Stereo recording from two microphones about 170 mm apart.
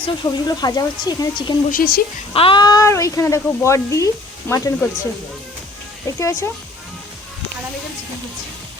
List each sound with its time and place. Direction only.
0.0 s speech: 25° left (ahead or behind)
1.7 s a woman's voice: 65° left (ahead or behind)
2.3 s speech: 30° left (ahead or behind)
6.1 s speech: 15° left (ahead or behind)